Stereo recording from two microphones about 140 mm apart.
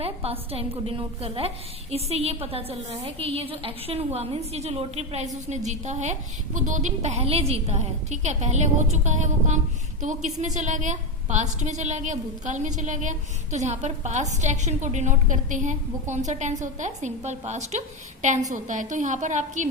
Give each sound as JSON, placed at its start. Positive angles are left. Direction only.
{"t": 0.0, "sound": "a woman's voice", "side_deg": -45}